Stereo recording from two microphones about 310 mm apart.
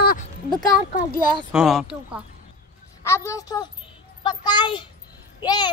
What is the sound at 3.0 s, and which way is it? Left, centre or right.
A woman's voice, centre.